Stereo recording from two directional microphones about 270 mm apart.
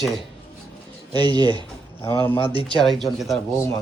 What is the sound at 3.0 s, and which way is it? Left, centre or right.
Speech, centre.